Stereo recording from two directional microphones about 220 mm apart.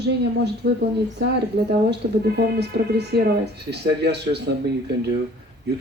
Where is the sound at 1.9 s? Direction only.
50° right (ahead or behind).